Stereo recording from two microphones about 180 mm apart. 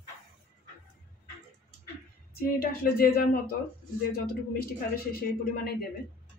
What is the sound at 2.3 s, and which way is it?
Speech, 55° left (ahead or behind).